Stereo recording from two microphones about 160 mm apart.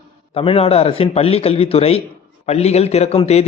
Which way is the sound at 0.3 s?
35° left (ahead or behind).